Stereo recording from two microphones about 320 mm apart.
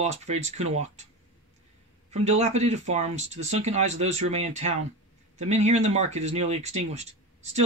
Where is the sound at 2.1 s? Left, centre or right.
Centre.